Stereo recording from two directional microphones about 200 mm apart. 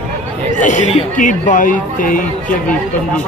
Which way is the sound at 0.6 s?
40° left (ahead or behind).